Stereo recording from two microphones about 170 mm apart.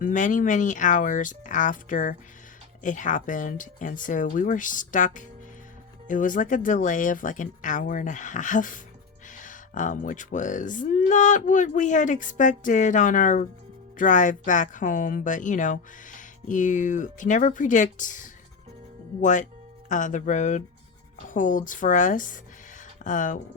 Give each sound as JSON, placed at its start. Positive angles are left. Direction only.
{"t": 0.0, "sound": "a woman's voice", "side_deg": 50}